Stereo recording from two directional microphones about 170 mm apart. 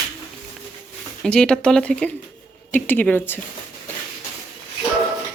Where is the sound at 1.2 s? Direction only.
5° left (ahead or behind).